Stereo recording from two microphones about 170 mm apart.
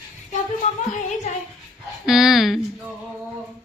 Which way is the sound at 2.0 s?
Centre (ahead or behind).